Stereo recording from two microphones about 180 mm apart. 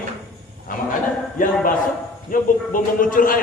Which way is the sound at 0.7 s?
50° left (ahead or behind).